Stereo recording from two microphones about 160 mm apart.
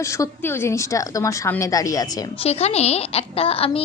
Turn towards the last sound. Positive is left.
turn(degrees=35)  # may be behind; listen again after turning